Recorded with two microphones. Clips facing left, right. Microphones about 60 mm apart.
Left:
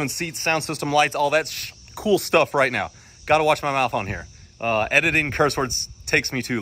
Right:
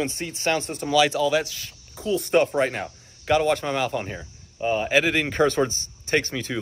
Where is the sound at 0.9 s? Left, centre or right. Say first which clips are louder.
Left 1 dB; left.